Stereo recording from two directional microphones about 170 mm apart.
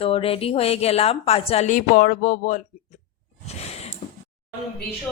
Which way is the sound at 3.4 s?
40° left (ahead or behind).